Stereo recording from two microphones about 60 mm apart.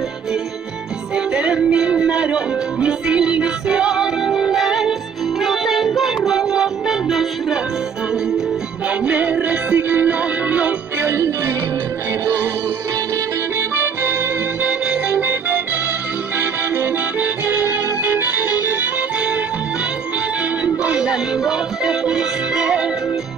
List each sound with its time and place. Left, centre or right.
1.1 s music: centre
9.0 s music: right
11.0 s music: right
13.6 s music: right
14.6 s organ: right
16.3 s accordion: right
18.7 s music: right
20.6 s music: centre